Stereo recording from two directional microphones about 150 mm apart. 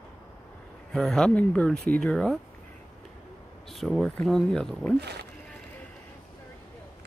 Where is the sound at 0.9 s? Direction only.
5° left (ahead or behind).